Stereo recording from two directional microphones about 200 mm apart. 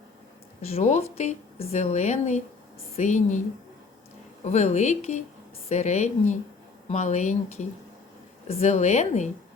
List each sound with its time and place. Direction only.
0.7 s a woman's voice: 35° left (ahead or behind)
4.4 s a woman's voice: 35° left (ahead or behind)